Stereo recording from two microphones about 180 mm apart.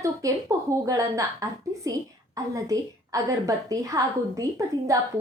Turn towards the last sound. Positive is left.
turn(degrees=-20)  # may be behind; listen again after turning